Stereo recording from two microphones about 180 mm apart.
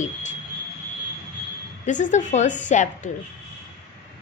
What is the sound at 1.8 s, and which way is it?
A woman's voice, 45° left (ahead or behind).